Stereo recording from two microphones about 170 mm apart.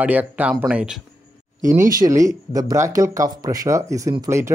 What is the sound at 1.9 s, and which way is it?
Speech, 20° right (ahead or behind).